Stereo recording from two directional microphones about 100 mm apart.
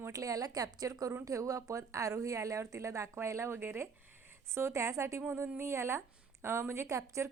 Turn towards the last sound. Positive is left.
turn(degrees=-30)  # may be behind; listen again after turning